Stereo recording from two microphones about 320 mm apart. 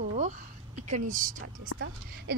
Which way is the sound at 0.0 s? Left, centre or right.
Right.